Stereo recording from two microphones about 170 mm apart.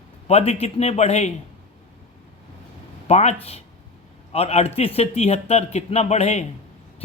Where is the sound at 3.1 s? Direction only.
40° left (ahead or behind).